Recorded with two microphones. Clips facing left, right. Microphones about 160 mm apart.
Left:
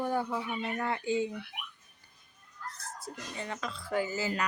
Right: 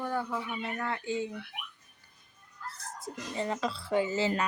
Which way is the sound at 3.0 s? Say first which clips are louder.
Right 7 dB; 25° right (ahead or behind).